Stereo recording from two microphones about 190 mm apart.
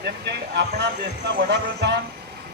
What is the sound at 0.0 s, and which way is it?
A man's voice, 60° right (ahead or behind).